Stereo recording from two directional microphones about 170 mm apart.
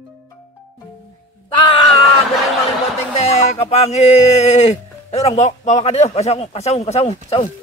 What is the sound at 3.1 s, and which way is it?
Speech, 40° left (ahead or behind).